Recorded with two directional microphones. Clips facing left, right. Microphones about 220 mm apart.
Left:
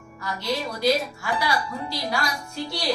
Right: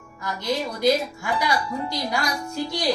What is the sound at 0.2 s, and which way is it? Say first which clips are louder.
Speech: right 2 dB; 20° right (ahead or behind).